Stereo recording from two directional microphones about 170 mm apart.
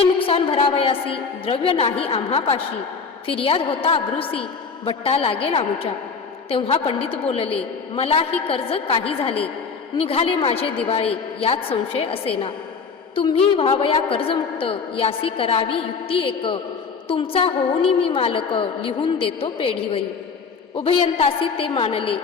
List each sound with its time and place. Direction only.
0.2 s a woman's voice: 30° left (ahead or behind)